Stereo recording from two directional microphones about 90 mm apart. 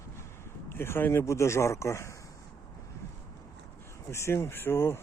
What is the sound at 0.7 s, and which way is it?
Speech, 25° left (ahead or behind).